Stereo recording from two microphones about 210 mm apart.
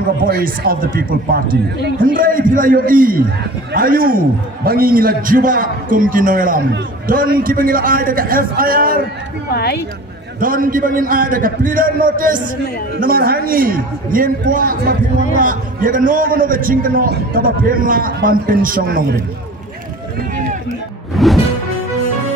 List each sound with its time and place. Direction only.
0.2 s a man's voice: 45° right (ahead or behind)
9.5 s a woman's voice: 50° left (ahead or behind)
10.4 s a man's voice: 40° right (ahead or behind)
21.2 s music: centre (ahead or behind)